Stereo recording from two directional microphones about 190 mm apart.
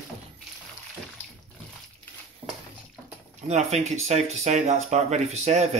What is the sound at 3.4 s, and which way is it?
Speech, 35° right (ahead or behind).